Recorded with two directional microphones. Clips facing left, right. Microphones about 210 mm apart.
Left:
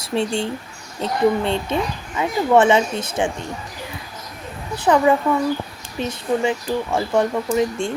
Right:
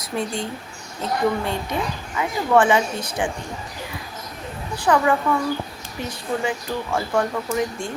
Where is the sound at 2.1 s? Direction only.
25° left (ahead or behind).